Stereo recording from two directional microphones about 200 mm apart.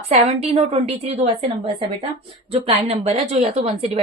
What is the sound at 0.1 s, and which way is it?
A woman's voice, 30° right (ahead or behind).